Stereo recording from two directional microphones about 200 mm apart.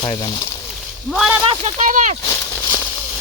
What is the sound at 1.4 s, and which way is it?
Speech, 35° right (ahead or behind).